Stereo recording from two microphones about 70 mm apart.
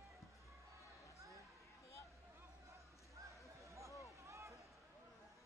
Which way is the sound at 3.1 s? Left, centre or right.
Right.